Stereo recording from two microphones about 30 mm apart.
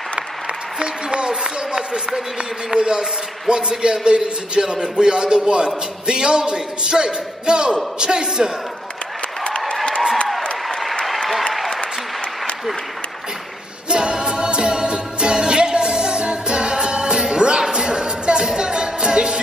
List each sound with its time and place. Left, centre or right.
0.7 s a man's voice: right
13.8 s music: right